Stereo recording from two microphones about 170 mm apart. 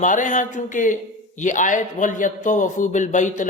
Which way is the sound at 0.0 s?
50° left (ahead or behind).